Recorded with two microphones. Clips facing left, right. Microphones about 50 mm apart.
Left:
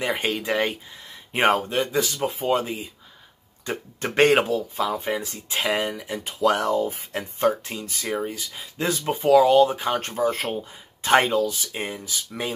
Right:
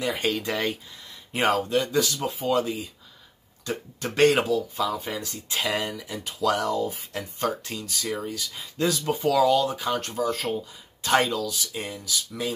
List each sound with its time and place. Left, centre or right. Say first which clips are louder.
0.0 s speech: left 1 dB; left
1.9 s speech: left 1 dB; centre